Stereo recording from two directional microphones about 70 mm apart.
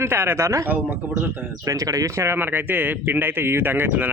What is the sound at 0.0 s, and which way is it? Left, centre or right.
Speech, right.